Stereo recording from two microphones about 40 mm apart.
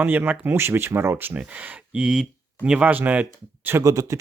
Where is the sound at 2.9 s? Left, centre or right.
Right.